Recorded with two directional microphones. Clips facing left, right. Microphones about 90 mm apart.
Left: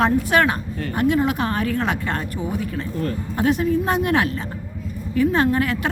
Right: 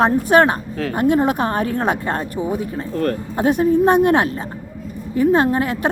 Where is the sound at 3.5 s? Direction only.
45° right (ahead or behind); by 5.9 s 25° right (ahead or behind).